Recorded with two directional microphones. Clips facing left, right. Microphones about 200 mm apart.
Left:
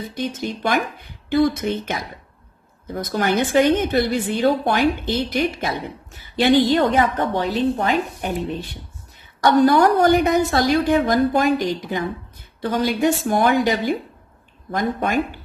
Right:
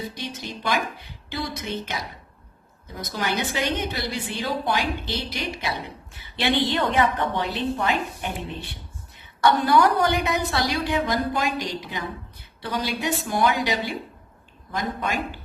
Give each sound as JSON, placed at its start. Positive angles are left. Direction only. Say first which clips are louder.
{"t": 0.1, "sound": "a woman's voice", "louder": "left 8 dB", "side_deg": 50}